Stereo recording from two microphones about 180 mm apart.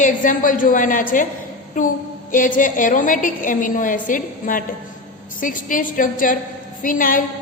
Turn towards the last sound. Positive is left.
turn(degrees=50)  # may be behind; listen again after turning